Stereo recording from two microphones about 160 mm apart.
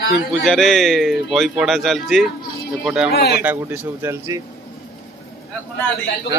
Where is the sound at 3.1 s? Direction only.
90° left.